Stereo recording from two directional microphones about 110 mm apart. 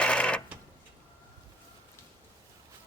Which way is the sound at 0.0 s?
10° left (ahead or behind).